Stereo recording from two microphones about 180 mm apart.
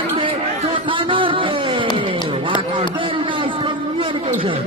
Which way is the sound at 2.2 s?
30° right (ahead or behind).